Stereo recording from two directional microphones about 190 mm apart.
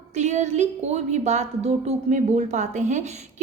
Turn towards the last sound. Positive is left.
turn(degrees=-35)  # may be behind; listen again after turning